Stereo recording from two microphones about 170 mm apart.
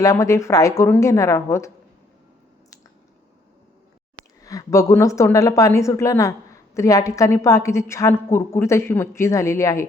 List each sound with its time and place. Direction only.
0.0 s a woman's voice: 20° left (ahead or behind)
4.4 s a woman's voice: 20° left (ahead or behind)